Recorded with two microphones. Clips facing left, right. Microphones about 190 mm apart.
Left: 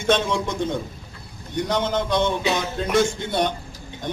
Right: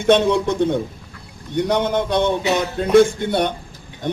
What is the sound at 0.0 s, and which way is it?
A man's voice, 60° right (ahead or behind).